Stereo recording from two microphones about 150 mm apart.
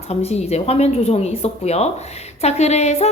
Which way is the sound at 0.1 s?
45° left (ahead or behind).